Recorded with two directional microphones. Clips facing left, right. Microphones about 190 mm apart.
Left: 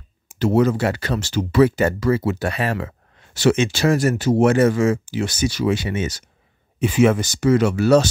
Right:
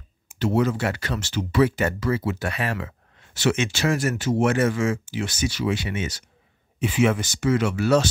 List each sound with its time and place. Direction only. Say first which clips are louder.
0.4 s speech: left 5 dB; 40° left (ahead or behind)